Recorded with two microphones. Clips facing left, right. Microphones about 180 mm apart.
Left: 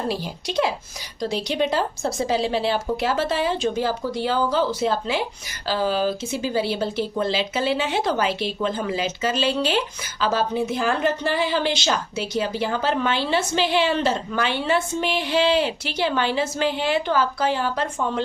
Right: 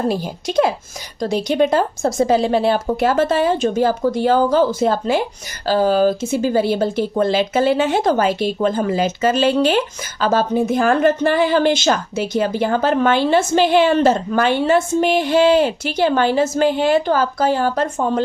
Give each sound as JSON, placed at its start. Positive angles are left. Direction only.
{"t": 0.1, "sound": "speech", "side_deg": -45}